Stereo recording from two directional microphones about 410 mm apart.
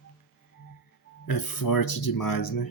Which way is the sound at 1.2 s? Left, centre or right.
Left.